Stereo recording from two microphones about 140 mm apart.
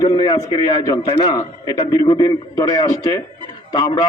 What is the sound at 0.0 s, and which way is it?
A man's voice, 30° left (ahead or behind).